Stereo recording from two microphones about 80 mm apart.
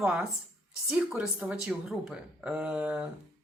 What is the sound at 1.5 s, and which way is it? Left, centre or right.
Speech, centre.